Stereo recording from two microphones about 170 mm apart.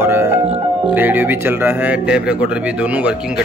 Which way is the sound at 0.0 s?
15° right (ahead or behind).